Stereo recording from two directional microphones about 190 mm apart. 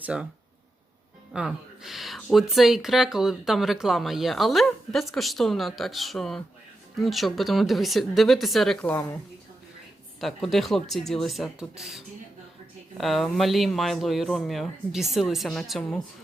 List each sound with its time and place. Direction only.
0.0 s speech: 5° right (ahead or behind)
1.3 s speech: centre (ahead or behind)
10.2 s speech: centre (ahead or behind)